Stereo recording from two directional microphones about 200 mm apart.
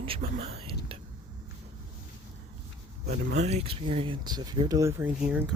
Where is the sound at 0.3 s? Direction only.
30° right (ahead or behind).